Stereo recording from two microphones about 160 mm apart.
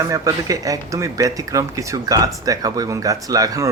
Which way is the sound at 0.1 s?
20° right (ahead or behind).